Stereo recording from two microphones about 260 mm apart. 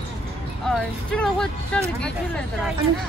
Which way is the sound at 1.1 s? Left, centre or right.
Centre.